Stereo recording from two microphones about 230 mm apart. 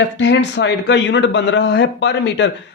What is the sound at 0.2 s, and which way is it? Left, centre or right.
Speech, left.